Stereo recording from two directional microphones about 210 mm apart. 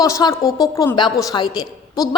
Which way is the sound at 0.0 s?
15° left (ahead or behind).